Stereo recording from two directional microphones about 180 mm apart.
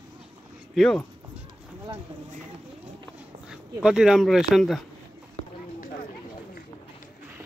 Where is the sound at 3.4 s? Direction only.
5° right (ahead or behind).